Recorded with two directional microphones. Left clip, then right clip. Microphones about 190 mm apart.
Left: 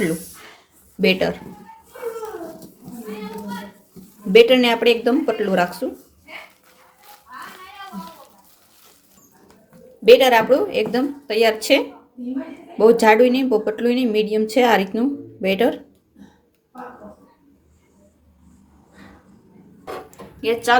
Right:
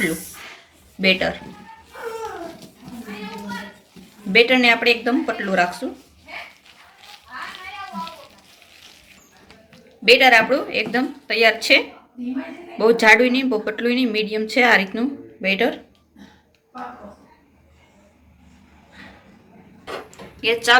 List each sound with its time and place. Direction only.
1.0 s a woman's voice: 50° left (ahead or behind)
4.3 s a woman's voice: 50° left (ahead or behind)
10.1 s a woman's voice: 40° left (ahead or behind)
12.8 s a woman's voice: 40° left (ahead or behind)
20.4 s a woman's voice: 40° left (ahead or behind)